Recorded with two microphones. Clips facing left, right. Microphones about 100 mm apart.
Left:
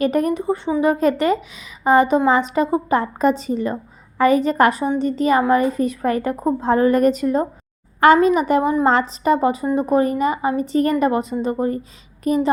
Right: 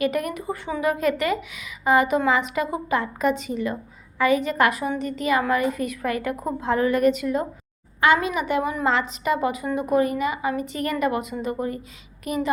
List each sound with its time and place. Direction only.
0.0 s a woman's voice: 35° left (ahead or behind)